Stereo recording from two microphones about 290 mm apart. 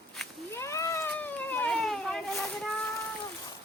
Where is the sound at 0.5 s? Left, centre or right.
Centre.